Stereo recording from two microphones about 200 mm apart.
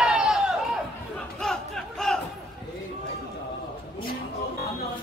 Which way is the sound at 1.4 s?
Centre (ahead or behind).